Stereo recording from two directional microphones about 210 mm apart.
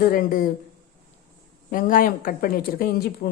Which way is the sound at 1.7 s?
40° left (ahead or behind).